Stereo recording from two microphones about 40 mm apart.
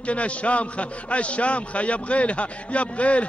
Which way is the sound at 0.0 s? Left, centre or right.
Left.